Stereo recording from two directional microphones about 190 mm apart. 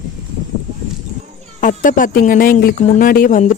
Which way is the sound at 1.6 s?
45° left (ahead or behind).